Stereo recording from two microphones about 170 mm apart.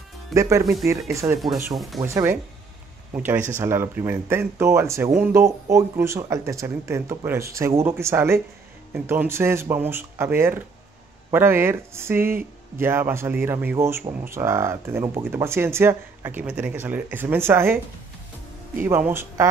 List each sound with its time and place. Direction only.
0.3 s speech: 20° right (ahead or behind)
18.9 s speech: 15° right (ahead or behind)